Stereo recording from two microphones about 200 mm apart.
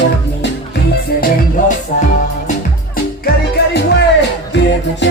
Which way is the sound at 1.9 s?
35° left (ahead or behind).